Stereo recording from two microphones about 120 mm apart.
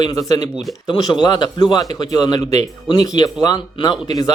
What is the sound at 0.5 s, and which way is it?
Speech, centre (ahead or behind).